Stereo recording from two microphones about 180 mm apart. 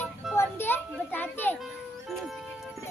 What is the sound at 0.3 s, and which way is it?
Children playing, 10° left (ahead or behind).